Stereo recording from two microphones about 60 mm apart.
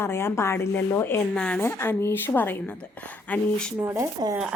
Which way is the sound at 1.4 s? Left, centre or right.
Centre.